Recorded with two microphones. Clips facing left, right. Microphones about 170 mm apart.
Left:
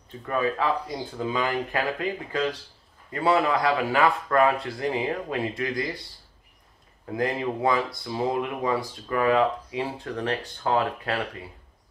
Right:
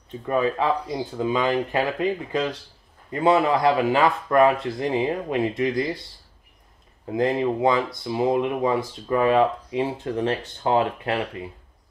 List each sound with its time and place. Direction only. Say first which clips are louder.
0.3 s speech: right 3 dB; 20° right (ahead or behind)
7.1 s speech: right 5 dB; 20° right (ahead or behind)